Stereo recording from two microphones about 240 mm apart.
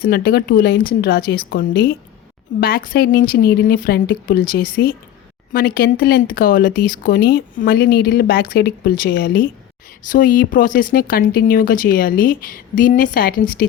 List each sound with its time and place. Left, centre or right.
0.0 s speech: left